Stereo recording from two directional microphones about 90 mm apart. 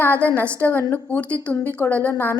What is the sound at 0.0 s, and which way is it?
A woman's voice, 20° left (ahead or behind).